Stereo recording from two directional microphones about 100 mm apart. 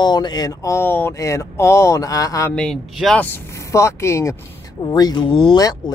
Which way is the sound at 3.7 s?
30° left (ahead or behind).